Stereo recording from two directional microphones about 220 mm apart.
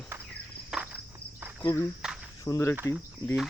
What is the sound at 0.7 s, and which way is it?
Insect, 5° right (ahead or behind).